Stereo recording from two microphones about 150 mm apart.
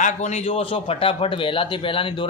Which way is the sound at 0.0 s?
50° left (ahead or behind).